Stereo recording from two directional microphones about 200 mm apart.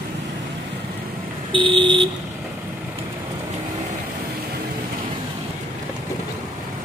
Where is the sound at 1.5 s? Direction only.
25° right (ahead or behind).